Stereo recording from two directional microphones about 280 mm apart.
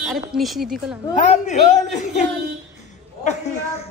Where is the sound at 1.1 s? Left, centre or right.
Left.